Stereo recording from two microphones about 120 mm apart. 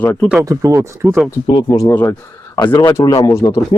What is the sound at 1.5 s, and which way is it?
Speech, 40° left (ahead or behind).